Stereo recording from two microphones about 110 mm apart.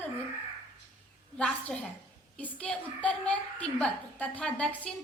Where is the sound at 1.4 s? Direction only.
10° left (ahead or behind).